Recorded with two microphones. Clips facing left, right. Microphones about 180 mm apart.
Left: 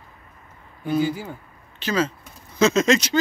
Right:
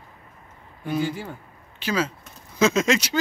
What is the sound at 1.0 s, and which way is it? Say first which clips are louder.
Speech: left 3 dB; 5° left (ahead or behind).